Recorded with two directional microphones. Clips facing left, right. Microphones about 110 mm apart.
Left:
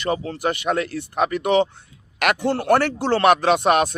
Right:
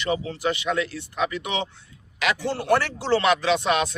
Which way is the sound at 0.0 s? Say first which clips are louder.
Left 2 dB; 45° left (ahead or behind).